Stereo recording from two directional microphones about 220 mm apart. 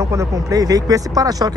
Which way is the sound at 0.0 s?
15° right (ahead or behind).